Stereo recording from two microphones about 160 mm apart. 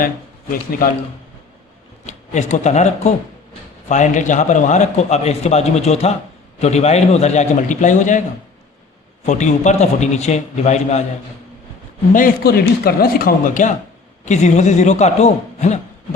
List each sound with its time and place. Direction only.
2.0 s a man's voice: 45° left (ahead or behind)
9.2 s a man's voice: 50° left (ahead or behind)
12.1 s a man's voice: 65° left (ahead or behind); by 15.8 s 45° left (ahead or behind)